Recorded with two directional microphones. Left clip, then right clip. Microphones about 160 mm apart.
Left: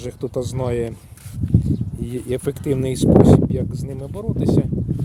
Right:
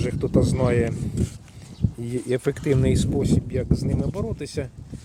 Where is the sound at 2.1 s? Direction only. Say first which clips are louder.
Even; 10° left (ahead or behind).